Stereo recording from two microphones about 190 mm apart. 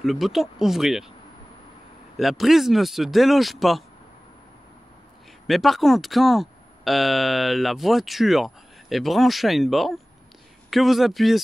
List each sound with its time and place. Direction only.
0.0 s speech: centre (ahead or behind)
2.1 s speech: centre (ahead or behind)
5.5 s speech: centre (ahead or behind)